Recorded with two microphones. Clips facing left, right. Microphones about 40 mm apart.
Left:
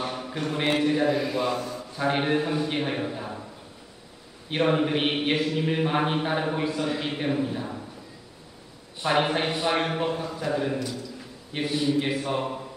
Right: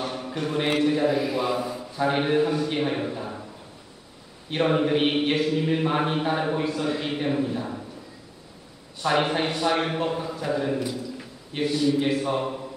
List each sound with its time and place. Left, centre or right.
0.0 s a man's voice: centre
1.6 s speech: centre
2.0 s speech: centre
2.5 s a man's voice: centre
2.8 s a man's voice: centre
4.5 s speech: centre
9.0 s speech: centre
9.5 s speech: centre
9.8 s a man's voice: centre